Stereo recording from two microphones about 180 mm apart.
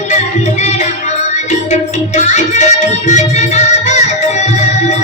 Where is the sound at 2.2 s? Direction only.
40° left (ahead or behind).